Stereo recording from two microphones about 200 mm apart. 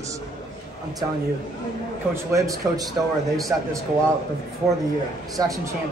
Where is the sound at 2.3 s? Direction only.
15° right (ahead or behind).